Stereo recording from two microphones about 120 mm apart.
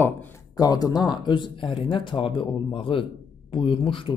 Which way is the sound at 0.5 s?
30° left (ahead or behind).